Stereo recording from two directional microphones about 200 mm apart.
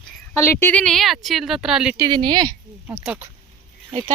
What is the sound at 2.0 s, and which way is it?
Speech, 20° right (ahead or behind).